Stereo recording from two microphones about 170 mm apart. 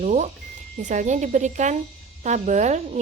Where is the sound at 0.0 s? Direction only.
45° right (ahead or behind).